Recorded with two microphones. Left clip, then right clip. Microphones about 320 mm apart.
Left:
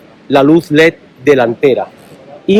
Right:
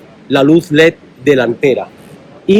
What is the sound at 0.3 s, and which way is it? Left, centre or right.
A man's voice, left.